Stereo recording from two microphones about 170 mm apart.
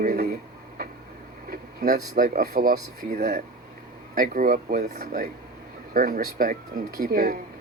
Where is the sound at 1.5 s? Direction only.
60° right (ahead or behind).